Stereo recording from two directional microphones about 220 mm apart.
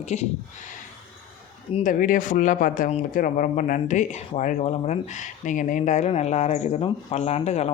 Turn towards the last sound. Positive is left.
turn(degrees=30)  # may be behind; listen again after turning